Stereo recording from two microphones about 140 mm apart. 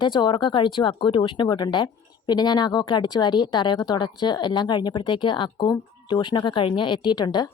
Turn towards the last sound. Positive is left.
turn(degrees=30)  # may be behind; listen again after turning